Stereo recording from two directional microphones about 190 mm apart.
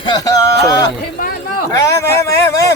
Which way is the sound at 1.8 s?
15° left (ahead or behind).